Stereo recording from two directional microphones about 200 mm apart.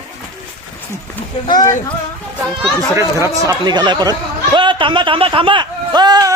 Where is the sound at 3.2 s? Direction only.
20° right (ahead or behind).